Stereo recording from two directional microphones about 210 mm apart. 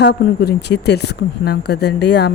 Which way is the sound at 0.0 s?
55° left (ahead or behind).